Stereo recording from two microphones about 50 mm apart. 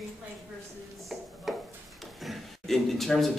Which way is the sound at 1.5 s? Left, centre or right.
Centre.